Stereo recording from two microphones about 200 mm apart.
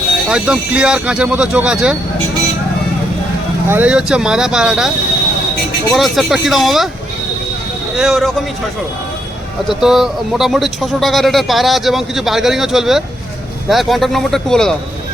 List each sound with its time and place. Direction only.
0.3 s speech: 5° right (ahead or behind)
3.7 s speech: 5° right (ahead or behind)
5.9 s speech: centre (ahead or behind)
7.9 s speech: centre (ahead or behind)
9.6 s speech: centre (ahead or behind)